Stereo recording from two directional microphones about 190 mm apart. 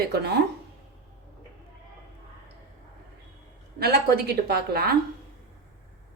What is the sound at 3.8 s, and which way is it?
A woman's voice, 55° right (ahead or behind).